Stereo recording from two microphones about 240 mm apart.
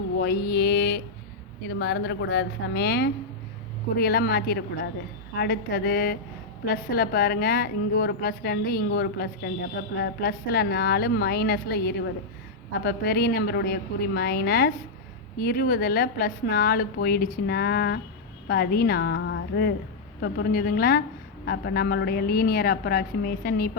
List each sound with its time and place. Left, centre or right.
0.2 s a woman's voice: left